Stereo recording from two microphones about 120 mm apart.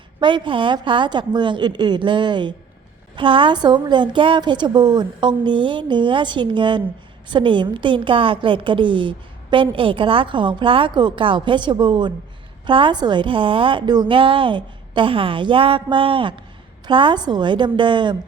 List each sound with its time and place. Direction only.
0.2 s a woman's voice: 40° right (ahead or behind)